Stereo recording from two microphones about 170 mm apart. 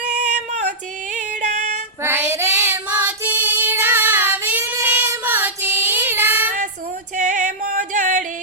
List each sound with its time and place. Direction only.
0.1 s female singing: 45° right (ahead or behind)
2.0 s child singing: 10° right (ahead or behind)
7.2 s music: 45° right (ahead or behind)